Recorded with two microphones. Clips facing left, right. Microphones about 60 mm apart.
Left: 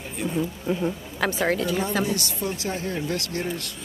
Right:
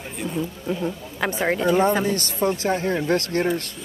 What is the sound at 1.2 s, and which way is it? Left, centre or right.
Speech, centre.